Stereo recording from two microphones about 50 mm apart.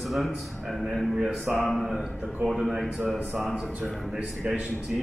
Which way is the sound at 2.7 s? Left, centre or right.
Centre.